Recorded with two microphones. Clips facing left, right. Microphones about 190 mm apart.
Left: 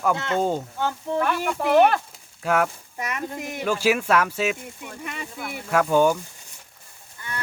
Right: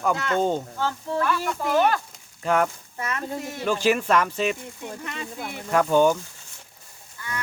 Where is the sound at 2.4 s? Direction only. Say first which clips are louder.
Even; 5° left (ahead or behind).